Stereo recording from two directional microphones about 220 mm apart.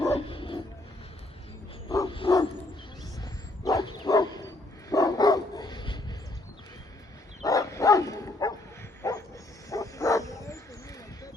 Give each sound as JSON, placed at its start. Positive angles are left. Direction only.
{"t": 0.1, "sound": "dog", "side_deg": 25}
{"t": 1.9, "sound": "dog", "side_deg": 20}
{"t": 3.6, "sound": "dog", "side_deg": 15}
{"t": 7.4, "sound": "bow-wow", "side_deg": 15}